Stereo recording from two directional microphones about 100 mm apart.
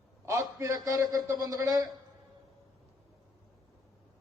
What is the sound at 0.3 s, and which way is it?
A man's voice, 30° right (ahead or behind).